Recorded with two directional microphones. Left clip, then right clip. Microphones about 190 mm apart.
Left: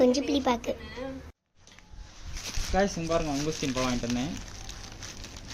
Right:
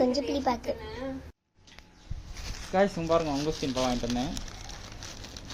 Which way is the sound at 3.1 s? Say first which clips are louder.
Even; 25° left (ahead or behind).